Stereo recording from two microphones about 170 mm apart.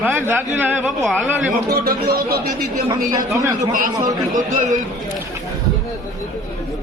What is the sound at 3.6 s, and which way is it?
Speech, 50° right (ahead or behind).